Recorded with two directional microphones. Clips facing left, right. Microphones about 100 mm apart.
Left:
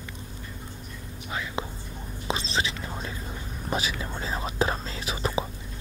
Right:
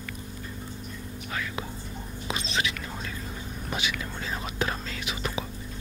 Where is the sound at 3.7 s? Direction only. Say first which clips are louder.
Left 3 dB; 30° left (ahead or behind).